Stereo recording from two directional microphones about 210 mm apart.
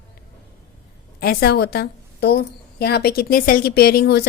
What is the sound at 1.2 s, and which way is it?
A woman's voice, 45° left (ahead or behind).